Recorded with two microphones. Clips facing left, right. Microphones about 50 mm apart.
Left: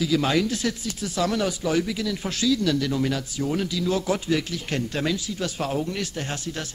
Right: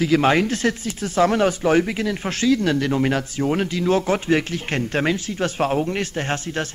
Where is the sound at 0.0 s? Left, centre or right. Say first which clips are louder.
Right 5 dB; right.